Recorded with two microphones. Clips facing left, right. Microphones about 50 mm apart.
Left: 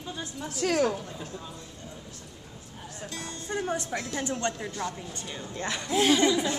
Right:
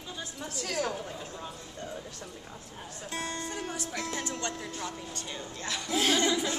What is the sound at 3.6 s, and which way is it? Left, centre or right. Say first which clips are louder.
Speech: left 4 dB; left.